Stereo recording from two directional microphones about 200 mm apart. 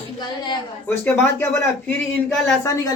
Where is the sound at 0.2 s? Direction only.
20° left (ahead or behind).